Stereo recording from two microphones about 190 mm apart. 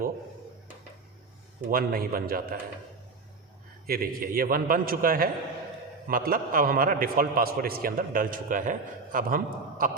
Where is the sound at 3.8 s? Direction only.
50° right (ahead or behind).